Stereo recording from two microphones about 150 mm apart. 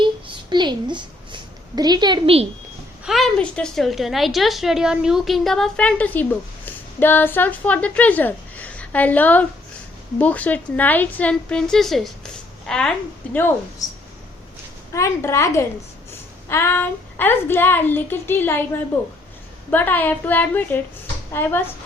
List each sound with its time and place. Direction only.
0.0 s a sound: 30° right (ahead or behind)
3.0 s a woman's voice: centre (ahead or behind)
14.9 s a woman's voice: 20° left (ahead or behind)